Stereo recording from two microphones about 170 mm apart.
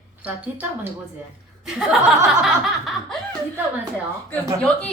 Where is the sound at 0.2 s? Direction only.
10° right (ahead or behind).